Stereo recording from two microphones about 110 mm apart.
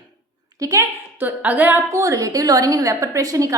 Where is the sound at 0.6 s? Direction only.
30° right (ahead or behind).